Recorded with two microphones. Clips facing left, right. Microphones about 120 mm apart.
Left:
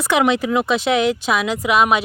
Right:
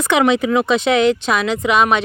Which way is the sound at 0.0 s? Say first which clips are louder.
Right 2 dB; 5° left (ahead or behind).